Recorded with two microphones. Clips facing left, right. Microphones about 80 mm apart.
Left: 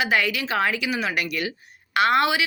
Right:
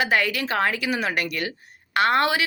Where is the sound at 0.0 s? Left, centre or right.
Right.